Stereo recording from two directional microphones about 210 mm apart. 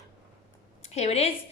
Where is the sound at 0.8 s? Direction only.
30° left (ahead or behind).